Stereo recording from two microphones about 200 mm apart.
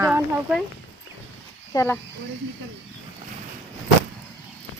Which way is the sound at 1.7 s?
10° left (ahead or behind).